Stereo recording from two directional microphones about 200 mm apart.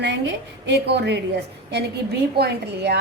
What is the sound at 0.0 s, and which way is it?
A woman's voice, 60° right (ahead or behind).